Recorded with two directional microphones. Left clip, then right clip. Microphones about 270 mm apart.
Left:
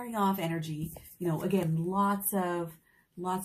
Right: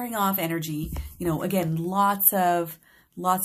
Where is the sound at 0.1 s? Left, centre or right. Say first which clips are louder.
Right 4 dB; right.